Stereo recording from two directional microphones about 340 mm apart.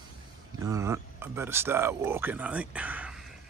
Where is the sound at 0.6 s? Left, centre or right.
Centre.